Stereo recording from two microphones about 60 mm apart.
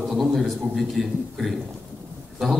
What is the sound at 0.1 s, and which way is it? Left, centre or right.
Speech, centre.